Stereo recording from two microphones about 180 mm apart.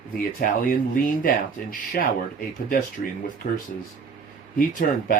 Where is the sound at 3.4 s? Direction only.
45° left (ahead or behind).